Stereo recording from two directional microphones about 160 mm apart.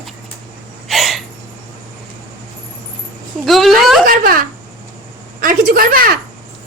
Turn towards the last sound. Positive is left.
turn(degrees=-65)  # may be behind; listen again after turning